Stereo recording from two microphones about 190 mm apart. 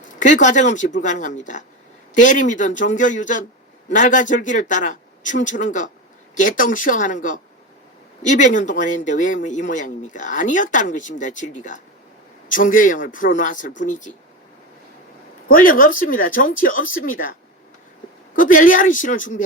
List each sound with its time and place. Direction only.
0.2 s speech: 40° left (ahead or behind)
15.4 s speech: 50° left (ahead or behind)
18.3 s speech: 45° left (ahead or behind)